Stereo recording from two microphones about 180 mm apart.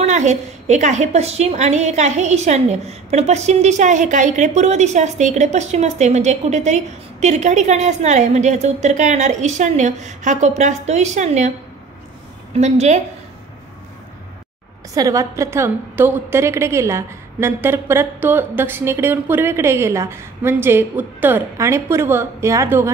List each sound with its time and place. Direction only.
0.0 s a woman's voice: 40° right (ahead or behind)
12.5 s a woman's voice: 40° right (ahead or behind)
15.0 s a woman's voice: 20° right (ahead or behind)